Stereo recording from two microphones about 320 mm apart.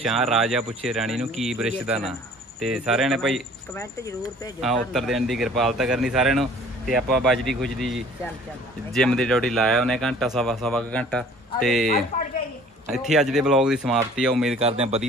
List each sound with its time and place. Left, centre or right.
0.1 s speech: centre
14.6 s a man's voice: centre